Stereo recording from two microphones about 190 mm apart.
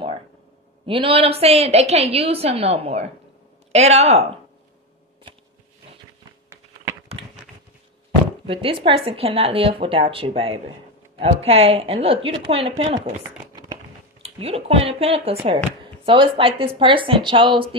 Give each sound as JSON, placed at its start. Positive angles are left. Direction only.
{"t": 0.8, "sound": "a woman's voice", "side_deg": -30}
{"t": 6.5, "sound": "typing", "side_deg": -15}
{"t": 8.5, "sound": "a woman's voice", "side_deg": -30}
{"t": 14.2, "sound": "a woman's voice", "side_deg": -30}